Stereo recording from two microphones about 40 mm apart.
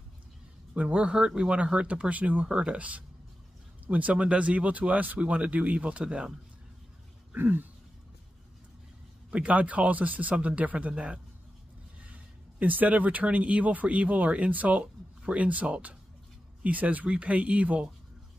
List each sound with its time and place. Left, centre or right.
0.7 s speech: right
2.4 s speech: right
7.3 s a sound: right
9.5 s speech: right
12.0 s speech: right